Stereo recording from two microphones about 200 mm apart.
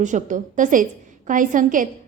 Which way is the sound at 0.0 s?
40° right (ahead or behind).